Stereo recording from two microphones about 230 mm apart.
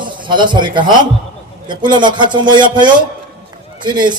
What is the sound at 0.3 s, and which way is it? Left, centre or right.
A man's voice, centre.